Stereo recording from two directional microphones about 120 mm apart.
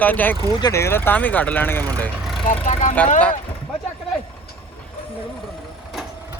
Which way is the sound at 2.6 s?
90° left.